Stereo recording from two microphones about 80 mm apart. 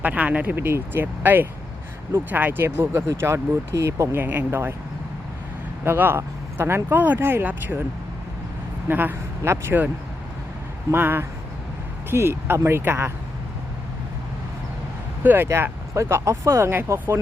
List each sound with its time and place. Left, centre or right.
0.0 s speech: centre; by 4.2 s right
4.2 s speech: right
5.8 s speech: right
8.9 s speech: right
10.9 s speech: right
15.2 s speech: right
16.0 s speech: right